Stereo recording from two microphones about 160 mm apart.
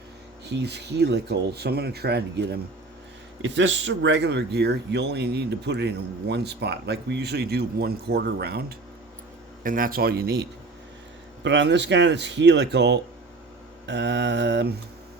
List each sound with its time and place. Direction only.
0.4 s speech: 90° right
4.1 s speech: 90° right
9.6 s speech: 60° right (ahead or behind); by 14.7 s 90° right